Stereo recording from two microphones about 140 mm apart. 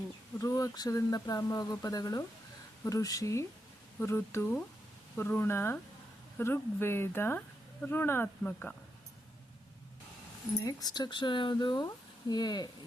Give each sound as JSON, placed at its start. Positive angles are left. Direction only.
{"t": 0.3, "sound": "speech", "side_deg": 25}
{"t": 10.7, "sound": "speech", "side_deg": 25}